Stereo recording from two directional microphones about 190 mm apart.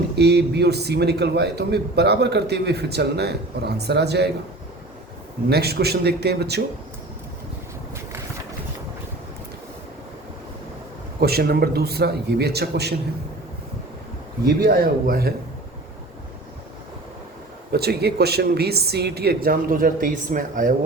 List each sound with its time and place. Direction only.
0.2 s a man's voice: 60° right (ahead or behind)
5.5 s a man's voice: 55° right (ahead or behind)
11.2 s a man's voice: 55° right (ahead or behind)
14.4 s speech: 50° right (ahead or behind)
17.7 s a man's voice: 55° right (ahead or behind)